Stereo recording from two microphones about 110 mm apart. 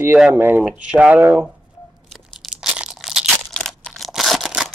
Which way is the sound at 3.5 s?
5° left (ahead or behind).